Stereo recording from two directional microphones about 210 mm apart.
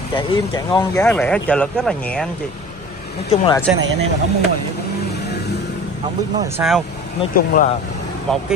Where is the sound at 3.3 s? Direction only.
20° left (ahead or behind).